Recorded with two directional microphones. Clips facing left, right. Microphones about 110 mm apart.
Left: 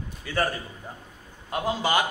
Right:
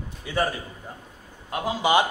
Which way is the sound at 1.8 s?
15° right (ahead or behind).